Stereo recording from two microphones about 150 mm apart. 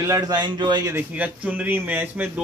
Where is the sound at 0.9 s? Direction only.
10° right (ahead or behind).